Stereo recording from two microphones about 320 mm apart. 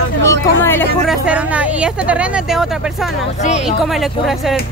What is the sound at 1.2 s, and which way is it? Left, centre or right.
Speech, centre.